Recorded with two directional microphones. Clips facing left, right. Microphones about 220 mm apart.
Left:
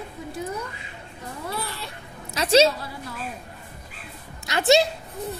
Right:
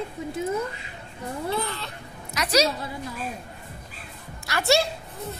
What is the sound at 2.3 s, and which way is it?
Speech, 25° left (ahead or behind).